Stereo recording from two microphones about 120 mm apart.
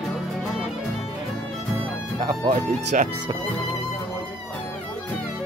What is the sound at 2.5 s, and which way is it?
Speech, 90° right.